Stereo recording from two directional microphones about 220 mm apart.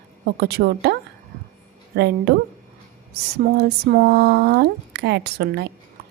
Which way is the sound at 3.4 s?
45° right (ahead or behind).